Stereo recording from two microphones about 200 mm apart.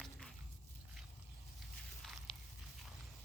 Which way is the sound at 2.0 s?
Centre (ahead or behind).